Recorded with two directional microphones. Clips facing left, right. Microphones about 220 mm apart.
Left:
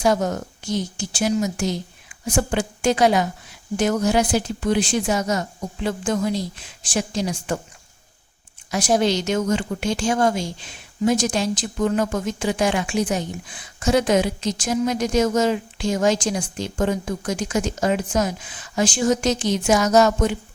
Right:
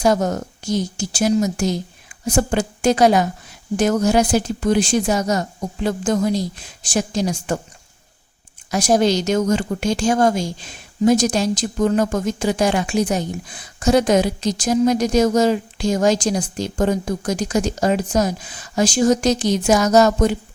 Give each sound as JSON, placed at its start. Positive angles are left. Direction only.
{"t": 0.0, "sound": "speech", "side_deg": -40}
{"t": 8.7, "sound": "speech", "side_deg": -40}